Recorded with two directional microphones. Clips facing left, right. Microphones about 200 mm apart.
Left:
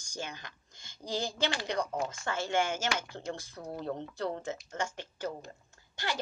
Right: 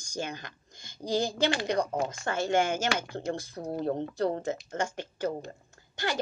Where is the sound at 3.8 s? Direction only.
50° right (ahead or behind).